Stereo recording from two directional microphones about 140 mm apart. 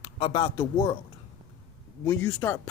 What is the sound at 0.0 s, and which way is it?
Speech, 35° left (ahead or behind).